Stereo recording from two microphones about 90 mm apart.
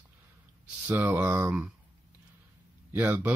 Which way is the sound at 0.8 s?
20° right (ahead or behind).